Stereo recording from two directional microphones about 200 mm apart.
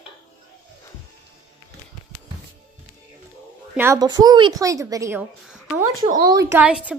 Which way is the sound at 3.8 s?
15° right (ahead or behind).